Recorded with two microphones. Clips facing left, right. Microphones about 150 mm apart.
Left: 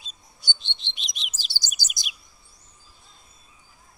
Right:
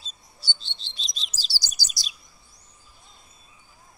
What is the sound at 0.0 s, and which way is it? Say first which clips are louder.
Bird: left 1 dB; 15° left (ahead or behind).